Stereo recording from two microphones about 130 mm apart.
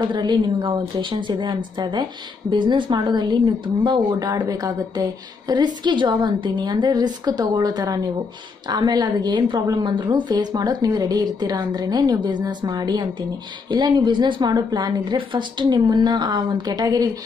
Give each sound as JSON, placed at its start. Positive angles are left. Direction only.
{"t": 0.0, "sound": "a woman's voice", "side_deg": -35}